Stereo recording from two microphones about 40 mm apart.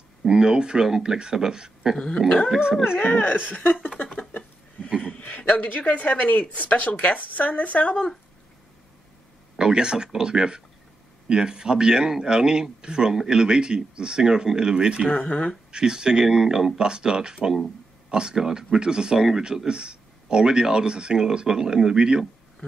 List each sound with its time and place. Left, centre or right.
0.3 s speech: centre
2.0 s dog: centre
2.7 s speech: centre
3.0 s speech: left
4.2 s a sound: left
5.5 s speech: left
9.6 s speech: centre
15.0 s speech: left
15.7 s speech: right